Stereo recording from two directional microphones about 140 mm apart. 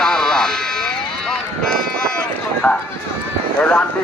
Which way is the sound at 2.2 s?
5° left (ahead or behind).